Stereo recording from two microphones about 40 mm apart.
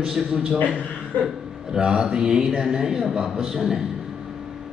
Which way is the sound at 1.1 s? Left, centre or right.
Left.